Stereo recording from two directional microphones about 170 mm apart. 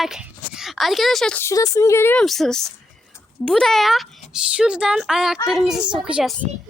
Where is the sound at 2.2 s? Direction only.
Centre (ahead or behind).